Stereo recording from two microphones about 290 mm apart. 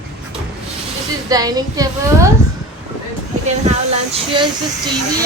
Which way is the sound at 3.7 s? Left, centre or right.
Centre.